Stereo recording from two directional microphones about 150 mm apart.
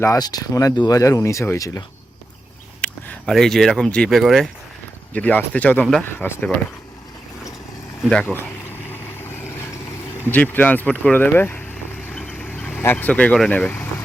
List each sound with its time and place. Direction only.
0.0 s speech: 25° left (ahead or behind)
2.8 s speech: 5° left (ahead or behind)
5.1 s speech: 10° left (ahead or behind)
8.0 s speech: 10° left (ahead or behind)
10.2 s speech: 10° left (ahead or behind)
12.0 s vehicle: 10° left (ahead or behind)